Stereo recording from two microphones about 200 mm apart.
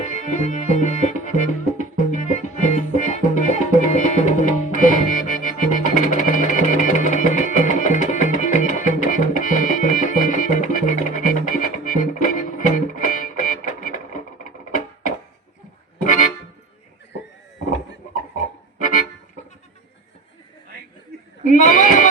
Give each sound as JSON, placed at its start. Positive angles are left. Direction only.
{"t": 0.0, "sound": "music", "side_deg": 35}
{"t": 16.0, "sound": "accordion", "side_deg": 40}
{"t": 18.8, "sound": "accordion", "side_deg": 40}
{"t": 21.4, "sound": "bleat", "side_deg": 40}